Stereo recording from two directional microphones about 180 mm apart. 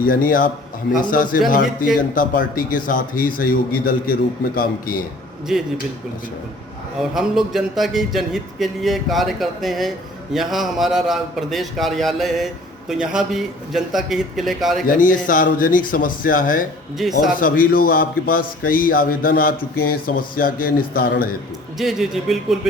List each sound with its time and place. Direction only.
0.0 s a man's voice: 50° left (ahead or behind)
5.5 s speech: centre (ahead or behind)
7.0 s speech: centre (ahead or behind)
14.8 s a man's voice: 50° left (ahead or behind)
21.8 s speech: centre (ahead or behind)